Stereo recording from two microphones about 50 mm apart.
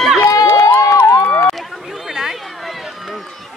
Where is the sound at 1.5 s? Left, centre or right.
Centre.